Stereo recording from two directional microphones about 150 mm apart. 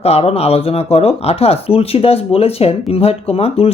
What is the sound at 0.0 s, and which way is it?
Speech, 45° left (ahead or behind).